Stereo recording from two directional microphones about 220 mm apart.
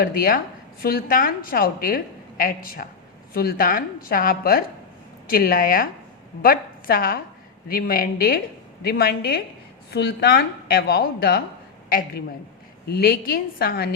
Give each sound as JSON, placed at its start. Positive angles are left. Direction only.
{"t": 0.0, "sound": "a woman's voice", "side_deg": 40}